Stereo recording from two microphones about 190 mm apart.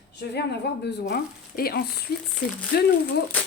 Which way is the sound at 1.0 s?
55° left (ahead or behind).